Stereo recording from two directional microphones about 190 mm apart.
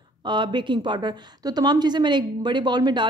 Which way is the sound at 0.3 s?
25° right (ahead or behind).